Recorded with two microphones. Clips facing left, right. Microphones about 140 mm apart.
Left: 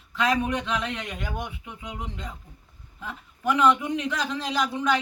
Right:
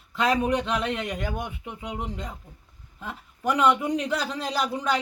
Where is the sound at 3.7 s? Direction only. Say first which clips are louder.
Right 2 dB; 35° right (ahead or behind).